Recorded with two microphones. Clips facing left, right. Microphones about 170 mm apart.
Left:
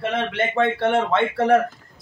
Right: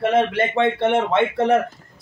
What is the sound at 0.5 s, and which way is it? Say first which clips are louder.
Speech: even; 20° right (ahead or behind).